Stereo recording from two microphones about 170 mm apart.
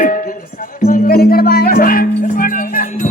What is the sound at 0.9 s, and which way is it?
Music, 65° left (ahead or behind).